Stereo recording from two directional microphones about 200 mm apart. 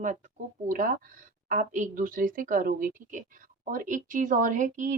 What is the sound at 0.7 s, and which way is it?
A woman's voice, 45° right (ahead or behind).